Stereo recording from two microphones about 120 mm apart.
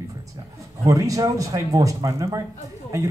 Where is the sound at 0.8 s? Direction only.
25° right (ahead or behind).